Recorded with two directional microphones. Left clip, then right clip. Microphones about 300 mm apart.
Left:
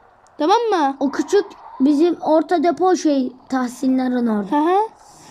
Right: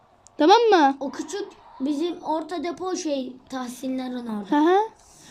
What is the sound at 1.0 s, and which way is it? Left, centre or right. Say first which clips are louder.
Speech: left 13 dB; left.